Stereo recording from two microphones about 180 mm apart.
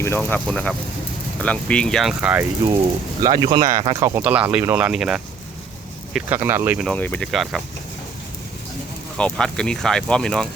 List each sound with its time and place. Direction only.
0.0 s speech: 10° left (ahead or behind); by 2.5 s 10° right (ahead or behind)
3.2 s speech: 20° right (ahead or behind)
4.2 s speech: 10° right (ahead or behind)
6.8 s speech: 10° left (ahead or behind)
9.1 s speech: 5° left (ahead or behind)